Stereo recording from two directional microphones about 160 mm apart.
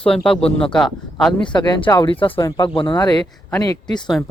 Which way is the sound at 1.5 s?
30° left (ahead or behind).